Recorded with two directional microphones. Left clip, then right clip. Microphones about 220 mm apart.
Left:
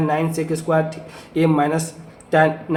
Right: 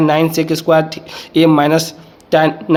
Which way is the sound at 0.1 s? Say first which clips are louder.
Right 7 dB; 45° right (ahead or behind).